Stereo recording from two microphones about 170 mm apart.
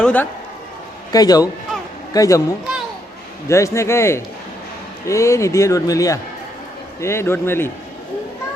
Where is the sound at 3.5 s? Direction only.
15° left (ahead or behind).